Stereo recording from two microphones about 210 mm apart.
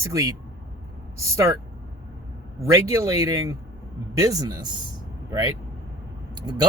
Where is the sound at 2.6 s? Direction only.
15° right (ahead or behind).